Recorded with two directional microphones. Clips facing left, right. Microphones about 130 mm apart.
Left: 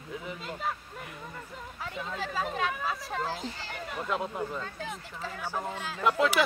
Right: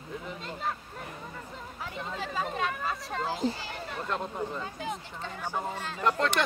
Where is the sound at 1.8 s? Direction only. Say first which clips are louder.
Left 1 dB; centre (ahead or behind).